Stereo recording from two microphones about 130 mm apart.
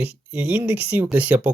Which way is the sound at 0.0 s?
10° right (ahead or behind).